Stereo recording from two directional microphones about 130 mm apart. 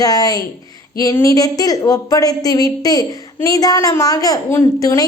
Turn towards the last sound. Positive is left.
turn(degrees=25)  # may be behind; listen again after turning